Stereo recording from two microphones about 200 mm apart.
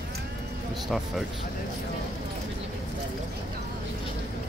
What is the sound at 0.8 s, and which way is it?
Speech, centre (ahead or behind).